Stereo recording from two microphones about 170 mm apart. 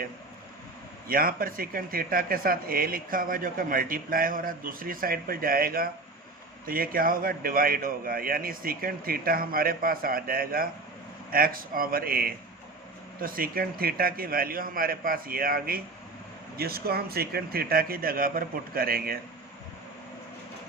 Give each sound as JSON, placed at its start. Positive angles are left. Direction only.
{"t": 1.0, "sound": "speech", "side_deg": -60}